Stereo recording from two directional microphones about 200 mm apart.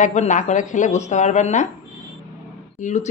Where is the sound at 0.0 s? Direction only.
35° left (ahead or behind).